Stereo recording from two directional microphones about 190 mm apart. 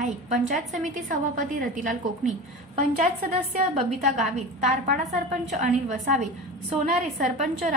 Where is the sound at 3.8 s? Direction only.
35° right (ahead or behind).